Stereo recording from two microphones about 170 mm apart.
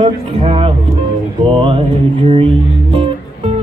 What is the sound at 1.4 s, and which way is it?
Music, 35° right (ahead or behind).